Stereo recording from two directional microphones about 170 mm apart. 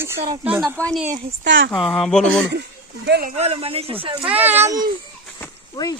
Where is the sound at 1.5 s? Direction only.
90° right.